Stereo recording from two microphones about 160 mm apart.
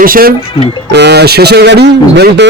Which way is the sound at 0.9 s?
90° right.